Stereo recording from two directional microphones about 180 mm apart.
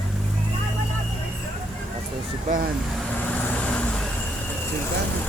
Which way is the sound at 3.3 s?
10° left (ahead or behind).